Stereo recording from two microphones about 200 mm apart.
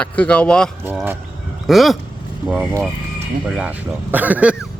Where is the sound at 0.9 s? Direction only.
10° right (ahead or behind).